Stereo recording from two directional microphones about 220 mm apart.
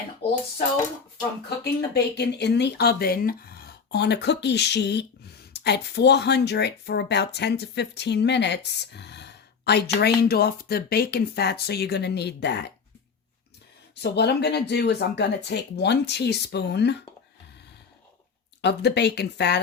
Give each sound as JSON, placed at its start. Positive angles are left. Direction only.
{"t": 1.5, "sound": "speech", "side_deg": 50}
{"t": 13.9, "sound": "speech", "side_deg": 50}
{"t": 18.6, "sound": "speech", "side_deg": 50}